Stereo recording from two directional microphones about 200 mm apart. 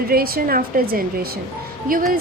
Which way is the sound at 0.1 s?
50° right (ahead or behind).